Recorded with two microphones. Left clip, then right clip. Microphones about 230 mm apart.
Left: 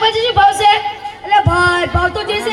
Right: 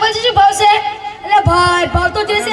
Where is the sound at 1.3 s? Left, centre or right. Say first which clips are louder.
Right 1 dB; right.